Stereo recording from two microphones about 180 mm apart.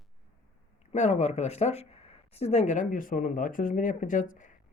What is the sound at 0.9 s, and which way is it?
Speech, 40° left (ahead or behind).